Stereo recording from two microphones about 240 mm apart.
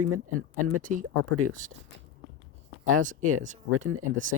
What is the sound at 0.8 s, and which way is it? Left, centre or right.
Speech, right.